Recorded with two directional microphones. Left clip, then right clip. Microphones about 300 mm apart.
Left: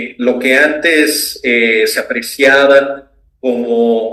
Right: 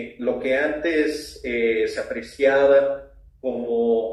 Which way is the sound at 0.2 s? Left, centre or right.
Left.